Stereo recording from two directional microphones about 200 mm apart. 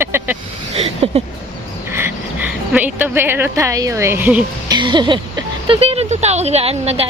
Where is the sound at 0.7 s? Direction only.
30° right (ahead or behind).